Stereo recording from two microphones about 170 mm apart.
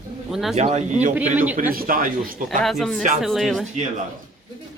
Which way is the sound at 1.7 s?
55° right (ahead or behind).